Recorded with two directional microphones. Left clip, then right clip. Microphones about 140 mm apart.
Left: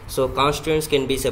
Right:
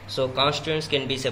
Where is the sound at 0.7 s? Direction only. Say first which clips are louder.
Left 6 dB; 90° left.